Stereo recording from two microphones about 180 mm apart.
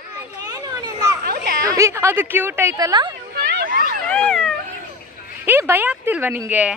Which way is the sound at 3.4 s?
65° right (ahead or behind).